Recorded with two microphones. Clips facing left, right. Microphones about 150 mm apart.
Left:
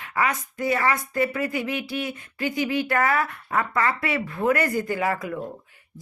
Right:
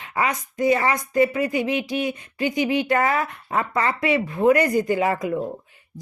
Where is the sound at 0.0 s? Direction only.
20° right (ahead or behind).